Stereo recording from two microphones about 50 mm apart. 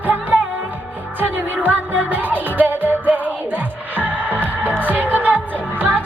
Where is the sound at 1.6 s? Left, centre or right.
Right.